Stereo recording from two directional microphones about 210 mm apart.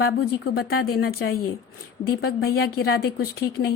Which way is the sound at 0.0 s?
50° left (ahead or behind).